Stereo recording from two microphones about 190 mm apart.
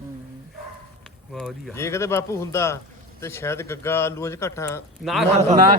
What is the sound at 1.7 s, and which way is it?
Speech, 15° left (ahead or behind).